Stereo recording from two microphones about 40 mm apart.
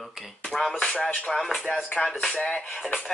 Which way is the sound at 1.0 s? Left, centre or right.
Centre.